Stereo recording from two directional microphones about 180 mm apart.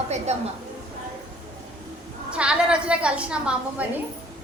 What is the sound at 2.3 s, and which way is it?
A woman's voice, 5° right (ahead or behind).